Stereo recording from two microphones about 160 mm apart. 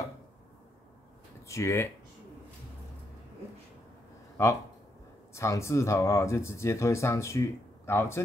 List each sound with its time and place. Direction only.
1.5 s speech: 15° left (ahead or behind)
5.3 s speech: 15° left (ahead or behind)